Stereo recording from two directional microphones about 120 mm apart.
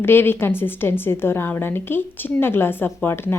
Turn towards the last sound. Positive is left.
turn(degrees=20)  # may be behind; listen again after turning